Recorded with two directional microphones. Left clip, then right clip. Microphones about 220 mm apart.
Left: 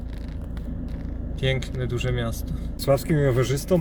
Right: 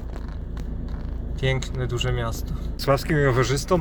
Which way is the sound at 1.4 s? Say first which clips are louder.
Even; centre (ahead or behind).